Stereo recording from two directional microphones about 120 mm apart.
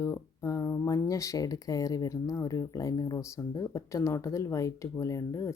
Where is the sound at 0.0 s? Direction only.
25° left (ahead or behind).